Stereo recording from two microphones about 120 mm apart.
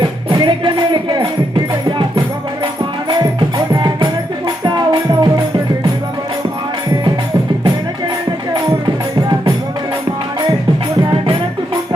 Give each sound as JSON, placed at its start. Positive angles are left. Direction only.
{"t": 0.3, "sound": "music", "side_deg": -45}
{"t": 3.7, "sound": "music", "side_deg": -35}